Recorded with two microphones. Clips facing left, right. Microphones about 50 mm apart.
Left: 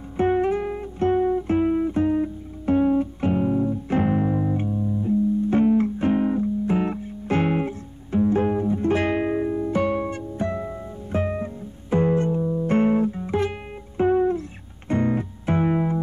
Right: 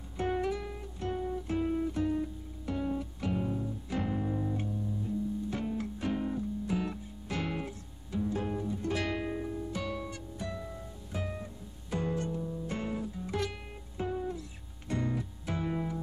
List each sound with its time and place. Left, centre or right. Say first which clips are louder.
0.2 s guitar: left 11 dB; left
13.9 s music: left 16 dB; left